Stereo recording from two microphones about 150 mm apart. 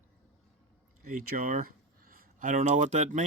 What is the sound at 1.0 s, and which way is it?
Speech, 65° right (ahead or behind).